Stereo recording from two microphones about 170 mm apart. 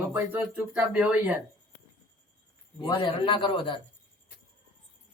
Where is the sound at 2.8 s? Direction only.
30° left (ahead or behind).